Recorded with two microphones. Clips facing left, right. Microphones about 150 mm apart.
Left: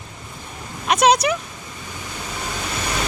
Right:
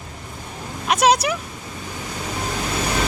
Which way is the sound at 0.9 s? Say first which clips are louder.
Left 1 dB; 5° right (ahead or behind).